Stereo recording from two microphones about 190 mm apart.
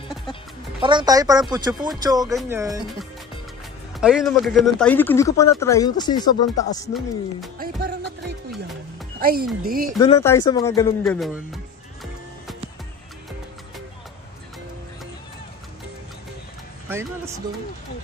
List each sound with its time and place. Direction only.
0.8 s speech: 20° right (ahead or behind)
4.0 s speech: centre (ahead or behind); by 6.3 s 20° left (ahead or behind)
6.9 s speech: centre (ahead or behind)
7.5 s music: 55° right (ahead or behind)
9.2 s speech: 55° right (ahead or behind)
9.9 s speech: 20° left (ahead or behind)
11.1 s speech: centre (ahead or behind)